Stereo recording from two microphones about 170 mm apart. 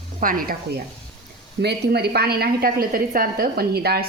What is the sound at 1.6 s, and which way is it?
A woman's voice, 70° right (ahead or behind).